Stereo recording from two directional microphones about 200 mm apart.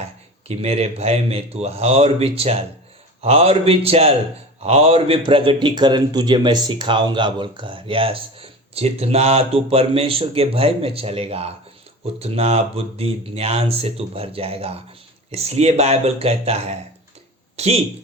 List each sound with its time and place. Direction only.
0.4 s a man's voice: 30° right (ahead or behind)